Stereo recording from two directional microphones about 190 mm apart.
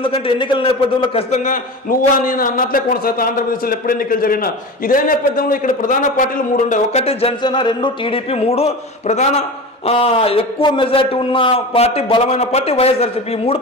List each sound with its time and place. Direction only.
0.0 s a man's voice: 30° left (ahead or behind)